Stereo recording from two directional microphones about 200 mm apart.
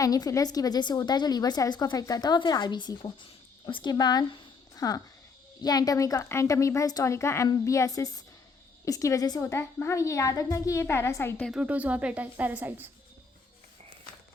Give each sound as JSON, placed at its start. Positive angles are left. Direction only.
{"t": 0.0, "sound": "a woman's voice", "side_deg": 15}
{"t": 11.6, "sound": "a woman's voice", "side_deg": -5}